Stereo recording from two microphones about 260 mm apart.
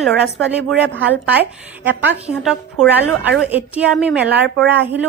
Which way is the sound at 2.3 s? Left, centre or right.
Centre.